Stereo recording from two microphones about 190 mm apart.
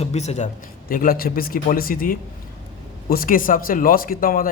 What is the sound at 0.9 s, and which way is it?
A man's voice, 50° left (ahead or behind).